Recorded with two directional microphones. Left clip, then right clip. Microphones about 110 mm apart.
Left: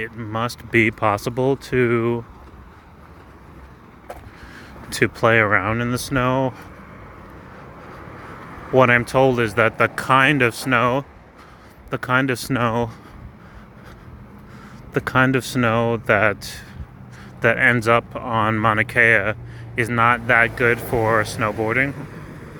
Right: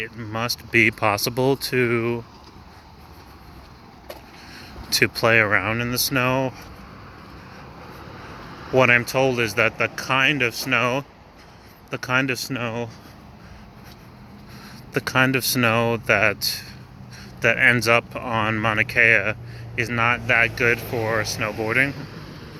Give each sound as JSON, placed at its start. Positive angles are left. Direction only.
{"t": 0.2, "sound": "speech", "side_deg": 30}
{"t": 4.5, "sound": "speech", "side_deg": 35}
{"t": 8.7, "sound": "speech", "side_deg": 40}
{"t": 9.7, "sound": "speech", "side_deg": 60}
{"t": 10.8, "sound": "speech", "side_deg": 40}
{"t": 12.3, "sound": "speech", "side_deg": 90}
{"t": 14.6, "sound": "speech", "side_deg": 30}
{"t": 15.6, "sound": "speech", "side_deg": 25}
{"t": 16.0, "sound": "speech", "side_deg": 40}
{"t": 17.4, "sound": "speech", "side_deg": 40}
{"t": 18.6, "sound": "speech", "side_deg": 45}
{"t": 19.9, "sound": "speech", "side_deg": 45}
{"t": 21.2, "sound": "speech", "side_deg": 55}
{"t": 21.7, "sound": "speech", "side_deg": 20}